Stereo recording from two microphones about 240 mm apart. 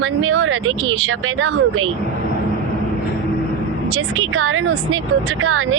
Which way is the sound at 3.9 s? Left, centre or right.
Right.